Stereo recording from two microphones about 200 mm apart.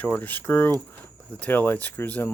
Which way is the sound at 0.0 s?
10° left (ahead or behind).